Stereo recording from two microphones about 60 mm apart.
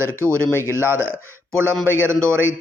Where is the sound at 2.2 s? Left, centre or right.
Right.